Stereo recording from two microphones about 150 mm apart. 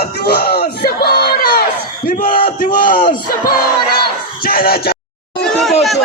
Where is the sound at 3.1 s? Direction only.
70° left (ahead or behind).